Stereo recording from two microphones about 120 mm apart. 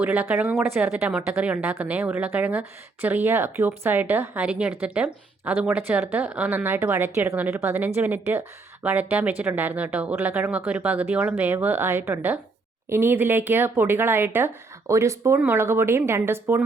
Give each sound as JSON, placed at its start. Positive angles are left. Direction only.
{"t": 0.0, "sound": "speech", "side_deg": -15}
{"t": 0.9, "sound": "speech", "side_deg": -10}